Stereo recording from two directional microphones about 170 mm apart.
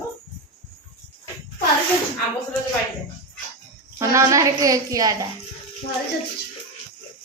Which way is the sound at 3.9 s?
20° right (ahead or behind).